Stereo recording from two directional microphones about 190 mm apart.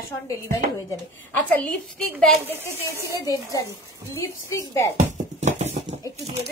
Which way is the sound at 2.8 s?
15° left (ahead or behind).